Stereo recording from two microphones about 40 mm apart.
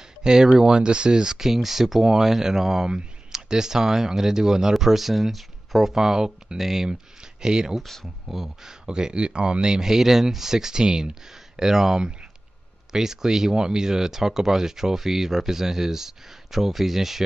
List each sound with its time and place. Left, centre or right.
0.2 s speech: centre
7.8 s speech: centre
8.3 s speech: centre
8.8 s speech: centre